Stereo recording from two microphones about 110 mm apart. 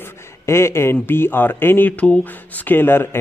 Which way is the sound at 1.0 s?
20° left (ahead or behind).